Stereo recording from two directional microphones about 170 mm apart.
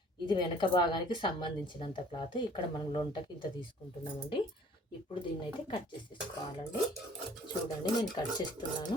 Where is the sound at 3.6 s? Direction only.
30° left (ahead or behind).